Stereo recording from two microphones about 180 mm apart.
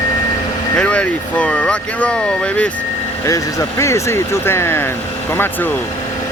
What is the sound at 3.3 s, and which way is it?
Speech, 15° left (ahead or behind).